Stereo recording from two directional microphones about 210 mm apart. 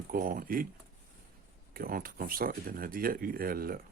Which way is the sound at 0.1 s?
40° right (ahead or behind).